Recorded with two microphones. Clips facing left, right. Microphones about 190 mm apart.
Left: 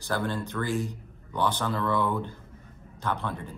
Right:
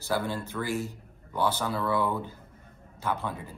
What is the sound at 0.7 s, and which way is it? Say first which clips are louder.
Speech: left 1 dB; 15° left (ahead or behind).